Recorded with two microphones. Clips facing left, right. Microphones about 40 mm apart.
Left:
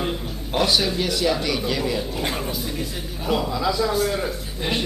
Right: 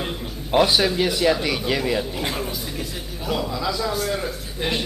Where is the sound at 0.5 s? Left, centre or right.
Centre.